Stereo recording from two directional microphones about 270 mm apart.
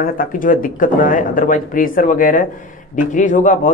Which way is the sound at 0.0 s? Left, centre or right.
Left.